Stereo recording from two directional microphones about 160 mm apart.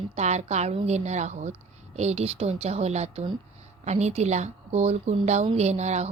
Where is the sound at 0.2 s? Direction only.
45° right (ahead or behind).